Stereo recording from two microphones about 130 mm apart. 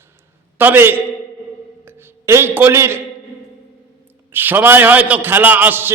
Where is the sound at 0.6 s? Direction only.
15° right (ahead or behind).